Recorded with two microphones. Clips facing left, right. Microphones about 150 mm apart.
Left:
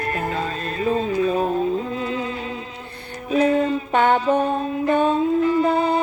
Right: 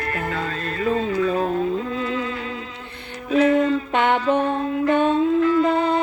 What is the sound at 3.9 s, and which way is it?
Mantra, 40° left (ahead or behind).